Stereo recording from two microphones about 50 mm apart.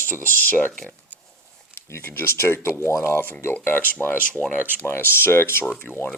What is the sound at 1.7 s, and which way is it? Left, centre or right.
Speech, left.